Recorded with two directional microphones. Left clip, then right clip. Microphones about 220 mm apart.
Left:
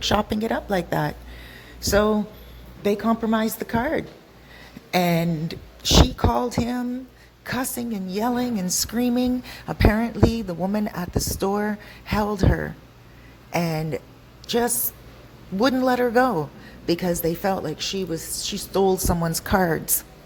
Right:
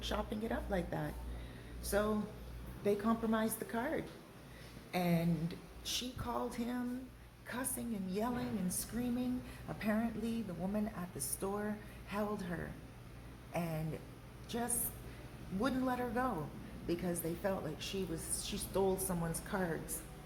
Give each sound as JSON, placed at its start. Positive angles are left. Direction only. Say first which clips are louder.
{"t": 0.0, "sound": "a woman's voice", "louder": "left 17 dB", "side_deg": 40}